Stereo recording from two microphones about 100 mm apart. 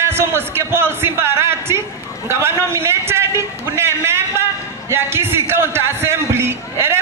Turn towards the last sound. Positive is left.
turn(degrees=-25)  # may be behind; listen again after turning